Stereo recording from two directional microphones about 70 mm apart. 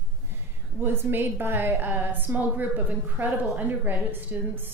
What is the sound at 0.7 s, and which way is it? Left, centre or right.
A woman's voice, right.